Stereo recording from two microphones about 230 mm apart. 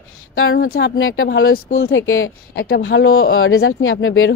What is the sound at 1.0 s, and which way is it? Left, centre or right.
Speech, left.